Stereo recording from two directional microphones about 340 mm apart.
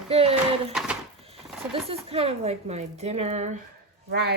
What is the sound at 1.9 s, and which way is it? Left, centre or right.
Speech, centre.